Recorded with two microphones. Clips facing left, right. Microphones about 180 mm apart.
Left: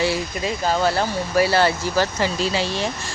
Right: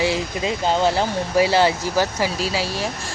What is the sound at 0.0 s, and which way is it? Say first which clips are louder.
Speech: right 1 dB; 20° right (ahead or behind).